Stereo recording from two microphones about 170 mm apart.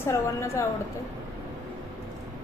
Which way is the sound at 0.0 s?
15° left (ahead or behind).